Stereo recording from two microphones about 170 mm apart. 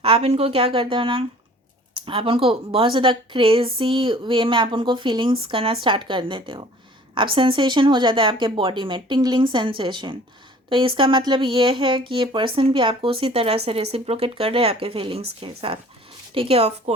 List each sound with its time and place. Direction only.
0.0 s a woman's voice: 35° right (ahead or behind)